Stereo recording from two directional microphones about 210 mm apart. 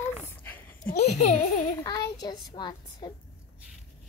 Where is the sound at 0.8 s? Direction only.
30° left (ahead or behind).